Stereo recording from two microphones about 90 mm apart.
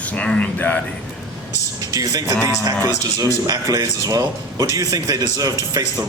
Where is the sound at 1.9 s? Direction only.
40° right (ahead or behind).